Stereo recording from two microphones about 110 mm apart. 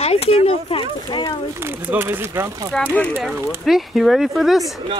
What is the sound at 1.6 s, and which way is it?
Speech, 20° right (ahead or behind).